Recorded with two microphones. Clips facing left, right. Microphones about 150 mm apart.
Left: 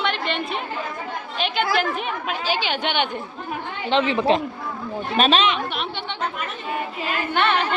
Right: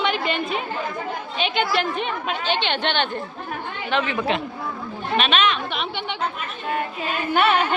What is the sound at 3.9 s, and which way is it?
A woman's voice, 25° left (ahead or behind).